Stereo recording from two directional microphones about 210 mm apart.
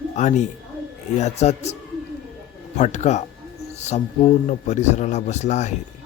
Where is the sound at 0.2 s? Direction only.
35° left (ahead or behind).